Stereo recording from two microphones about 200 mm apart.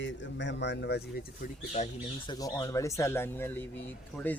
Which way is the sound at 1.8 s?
35° left (ahead or behind).